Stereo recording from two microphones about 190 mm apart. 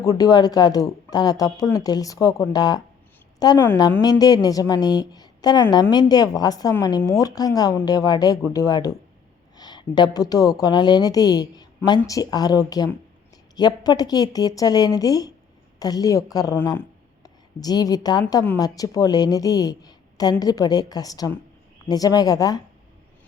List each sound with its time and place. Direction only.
0.0 s a woman's voice: 20° left (ahead or behind)